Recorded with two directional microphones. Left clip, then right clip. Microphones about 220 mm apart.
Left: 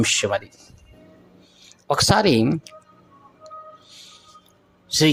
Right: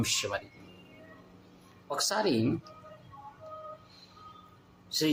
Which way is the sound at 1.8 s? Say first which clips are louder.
Left 12 dB; 40° left (ahead or behind).